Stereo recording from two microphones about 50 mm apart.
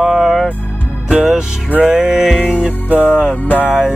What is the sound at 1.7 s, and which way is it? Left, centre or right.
Music, right.